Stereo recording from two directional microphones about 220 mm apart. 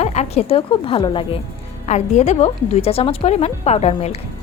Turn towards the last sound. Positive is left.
turn(degrees=30)  # may be behind; listen again after turning